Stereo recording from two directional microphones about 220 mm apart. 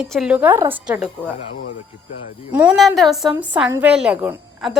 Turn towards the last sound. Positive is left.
turn(degrees=-5)  # may be behind; listen again after turning